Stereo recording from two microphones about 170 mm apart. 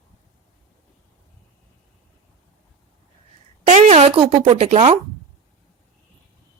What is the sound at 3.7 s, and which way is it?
A woman's voice, 40° right (ahead or behind).